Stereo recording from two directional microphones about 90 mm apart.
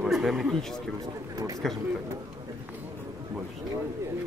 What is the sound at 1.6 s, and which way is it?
Speech, 5° left (ahead or behind).